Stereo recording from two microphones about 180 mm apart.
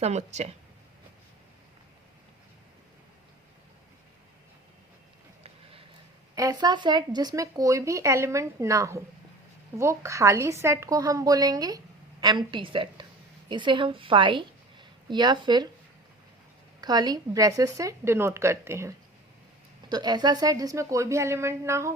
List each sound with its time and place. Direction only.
0.0 s speech: 40° right (ahead or behind)
6.3 s a woman's voice: 20° right (ahead or behind)
16.8 s a woman's voice: 20° right (ahead or behind)